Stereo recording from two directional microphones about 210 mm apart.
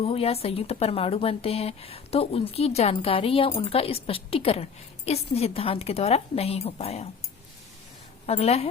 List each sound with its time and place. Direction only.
0.0 s speech: 30° left (ahead or behind)
8.3 s speech: 30° left (ahead or behind)